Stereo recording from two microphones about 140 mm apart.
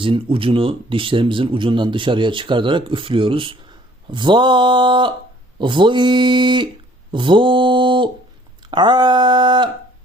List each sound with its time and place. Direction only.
0.0 s speech: 40° right (ahead or behind)
7.1 s mantra: 35° right (ahead or behind)
8.7 s a sound: 30° right (ahead or behind)